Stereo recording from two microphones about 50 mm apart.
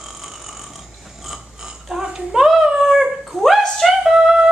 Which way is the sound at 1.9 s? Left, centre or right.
Centre.